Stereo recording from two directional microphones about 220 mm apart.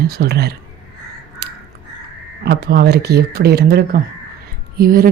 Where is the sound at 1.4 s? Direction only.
50° right (ahead or behind).